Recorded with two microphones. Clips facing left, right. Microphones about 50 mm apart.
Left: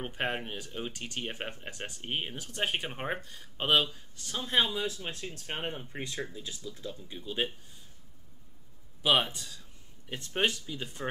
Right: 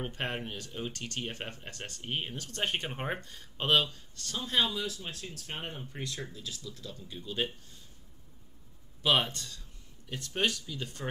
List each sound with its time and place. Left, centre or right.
0.0 s speech: centre
4.6 s speech: left
9.0 s speech: centre
10.0 s speech: left